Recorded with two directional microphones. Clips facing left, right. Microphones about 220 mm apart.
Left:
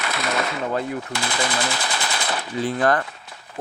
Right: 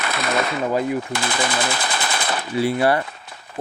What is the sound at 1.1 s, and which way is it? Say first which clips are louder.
Machine gun: right 2 dB; 55° right (ahead or behind).